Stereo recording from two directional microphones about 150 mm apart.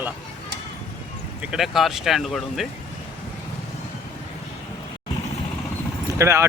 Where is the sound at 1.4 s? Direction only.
5° right (ahead or behind).